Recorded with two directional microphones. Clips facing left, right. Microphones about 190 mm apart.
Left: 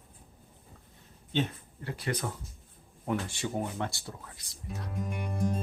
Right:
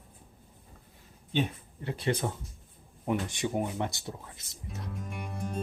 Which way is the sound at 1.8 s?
25° right (ahead or behind).